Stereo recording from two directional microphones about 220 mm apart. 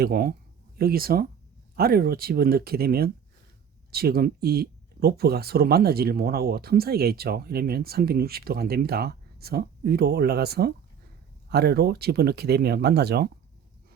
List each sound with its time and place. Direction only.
0.0 s speech: 45° right (ahead or behind)